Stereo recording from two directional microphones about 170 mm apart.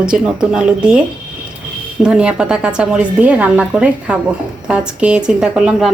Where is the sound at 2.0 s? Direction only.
5° right (ahead or behind).